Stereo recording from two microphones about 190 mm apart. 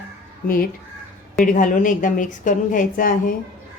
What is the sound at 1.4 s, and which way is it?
A woman's voice, 45° left (ahead or behind).